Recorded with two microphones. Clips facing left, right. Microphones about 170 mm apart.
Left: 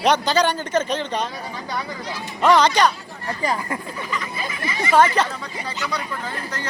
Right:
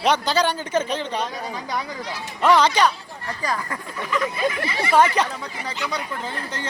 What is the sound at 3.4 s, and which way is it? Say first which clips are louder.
Speech: left 3 dB; 20° left (ahead or behind).